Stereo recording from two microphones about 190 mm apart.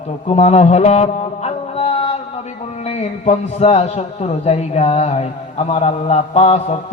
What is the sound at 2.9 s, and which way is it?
Mantra, 35° left (ahead or behind).